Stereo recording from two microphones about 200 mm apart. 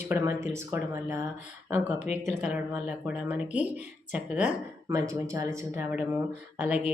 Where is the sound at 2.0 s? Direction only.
35° left (ahead or behind).